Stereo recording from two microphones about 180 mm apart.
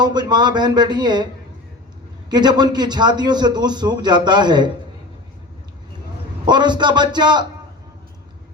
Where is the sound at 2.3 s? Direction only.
25° right (ahead or behind).